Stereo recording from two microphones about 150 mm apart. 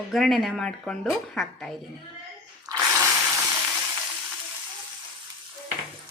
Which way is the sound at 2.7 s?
25° right (ahead or behind).